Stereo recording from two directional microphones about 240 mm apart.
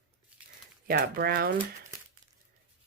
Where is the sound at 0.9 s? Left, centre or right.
Right.